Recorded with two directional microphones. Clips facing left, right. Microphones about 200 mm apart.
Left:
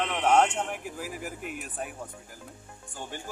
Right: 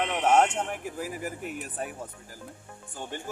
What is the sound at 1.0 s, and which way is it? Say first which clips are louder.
Speech: right 2 dB; 45° right (ahead or behind).